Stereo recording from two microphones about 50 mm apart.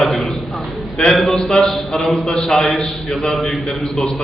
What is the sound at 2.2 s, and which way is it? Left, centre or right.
Speech, left.